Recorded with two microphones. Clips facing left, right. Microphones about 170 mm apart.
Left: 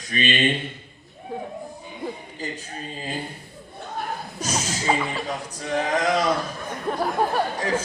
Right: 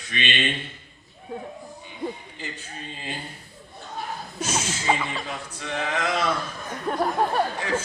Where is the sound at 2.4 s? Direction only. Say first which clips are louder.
Left 4 dB; 40° left (ahead or behind).